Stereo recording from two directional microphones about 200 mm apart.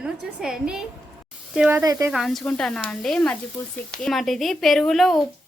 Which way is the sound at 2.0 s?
Centre (ahead or behind).